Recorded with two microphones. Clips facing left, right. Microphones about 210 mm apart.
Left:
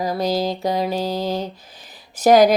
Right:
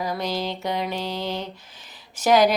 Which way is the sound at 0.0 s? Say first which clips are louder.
Left 6 dB; 40° left (ahead or behind).